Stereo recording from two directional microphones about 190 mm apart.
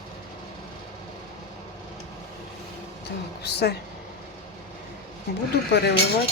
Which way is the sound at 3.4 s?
60° left (ahead or behind).